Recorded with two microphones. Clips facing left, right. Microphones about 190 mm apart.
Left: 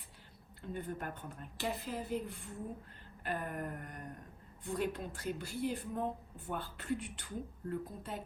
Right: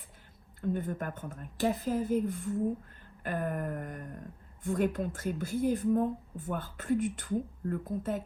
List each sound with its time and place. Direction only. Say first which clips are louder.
0.6 s a woman's voice: right 8 dB; 45° right (ahead or behind)